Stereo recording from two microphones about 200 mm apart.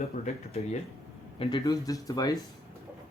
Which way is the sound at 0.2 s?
35° left (ahead or behind).